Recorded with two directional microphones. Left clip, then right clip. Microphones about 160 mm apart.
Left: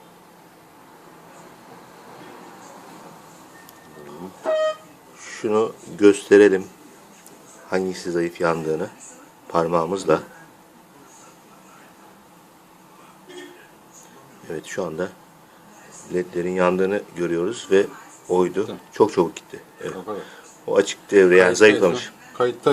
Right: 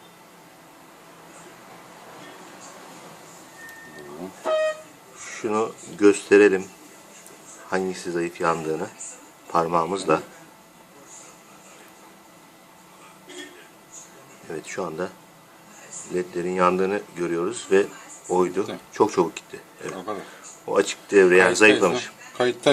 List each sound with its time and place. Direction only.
5.3 s speech: 10° left (ahead or behind)
7.7 s speech: 15° left (ahead or behind)
14.4 s speech: 15° left (ahead or behind)
16.1 s speech: 15° left (ahead or behind)